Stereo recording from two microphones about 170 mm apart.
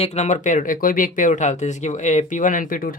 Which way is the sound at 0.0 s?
40° left (ahead or behind).